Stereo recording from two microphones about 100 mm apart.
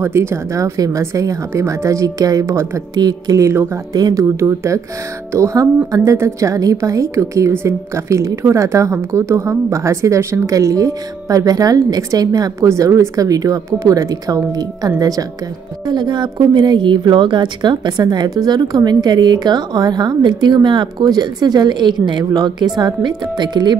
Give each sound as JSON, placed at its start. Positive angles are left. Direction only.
{"t": 0.0, "sound": "a woman's voice", "side_deg": -25}
{"t": 3.0, "sound": "a woman's voice", "side_deg": -40}
{"t": 3.9, "sound": "a woman's voice", "side_deg": -40}
{"t": 15.9, "sound": "a woman's voice", "side_deg": -50}
{"t": 22.2, "sound": "a woman's voice", "side_deg": -40}